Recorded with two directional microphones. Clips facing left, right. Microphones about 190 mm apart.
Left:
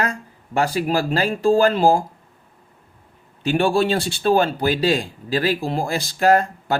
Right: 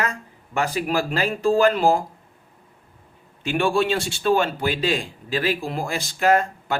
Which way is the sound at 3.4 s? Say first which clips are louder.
Left 3 dB; 35° left (ahead or behind).